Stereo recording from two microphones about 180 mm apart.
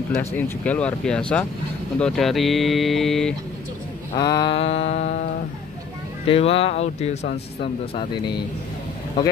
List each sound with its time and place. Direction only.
0.2 s speech: 5° left (ahead or behind)
4.1 s speech: 25° left (ahead or behind); by 5.1 s 40° left (ahead or behind)
6.2 s speech: 30° left (ahead or behind)